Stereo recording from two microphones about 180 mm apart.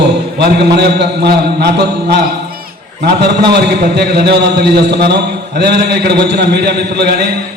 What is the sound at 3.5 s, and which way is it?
A man's voice, 65° right (ahead or behind).